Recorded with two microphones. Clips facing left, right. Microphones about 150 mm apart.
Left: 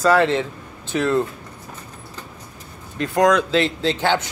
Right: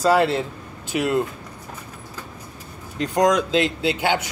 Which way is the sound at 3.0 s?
20° right (ahead or behind).